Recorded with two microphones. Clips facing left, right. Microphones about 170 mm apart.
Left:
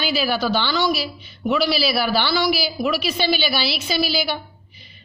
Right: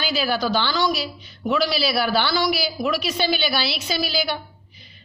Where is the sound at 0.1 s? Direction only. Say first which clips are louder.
Even; 5° left (ahead or behind).